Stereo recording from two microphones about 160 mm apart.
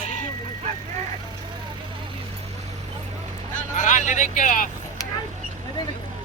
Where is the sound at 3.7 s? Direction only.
50° left (ahead or behind).